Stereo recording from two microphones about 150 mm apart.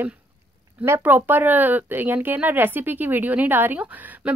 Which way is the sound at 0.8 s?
15° right (ahead or behind).